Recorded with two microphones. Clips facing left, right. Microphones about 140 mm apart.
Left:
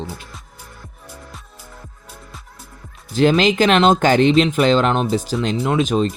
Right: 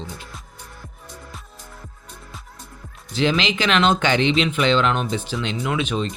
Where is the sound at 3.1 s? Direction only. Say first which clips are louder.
Left 6 dB; 45° left (ahead or behind).